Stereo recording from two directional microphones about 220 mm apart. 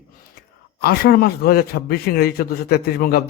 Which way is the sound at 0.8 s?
45° left (ahead or behind).